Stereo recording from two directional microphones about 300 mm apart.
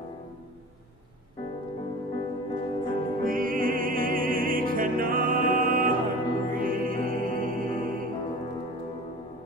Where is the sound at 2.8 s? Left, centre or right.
Right.